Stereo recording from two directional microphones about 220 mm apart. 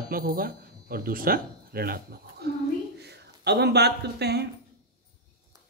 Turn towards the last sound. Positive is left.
turn(degrees=-50)  # may be behind; listen again after turning